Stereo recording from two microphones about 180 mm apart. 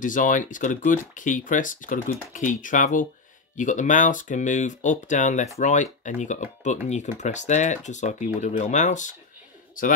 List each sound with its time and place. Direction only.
0.0 s speech: 45° left (ahead or behind)